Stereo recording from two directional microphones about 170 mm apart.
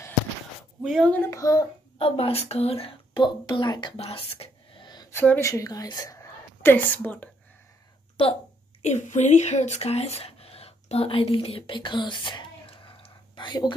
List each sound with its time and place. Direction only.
0.8 s a child's voice: 5° left (ahead or behind); by 1.7 s 20° left (ahead or behind)
2.0 s speech: 35° left (ahead or behind)
5.1 s a woman's voice: 10° left (ahead or behind)
8.8 s speech: 45° left (ahead or behind); by 13.7 s 25° left (ahead or behind)